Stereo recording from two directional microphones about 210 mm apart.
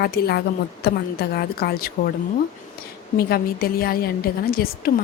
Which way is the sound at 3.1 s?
45° left (ahead or behind).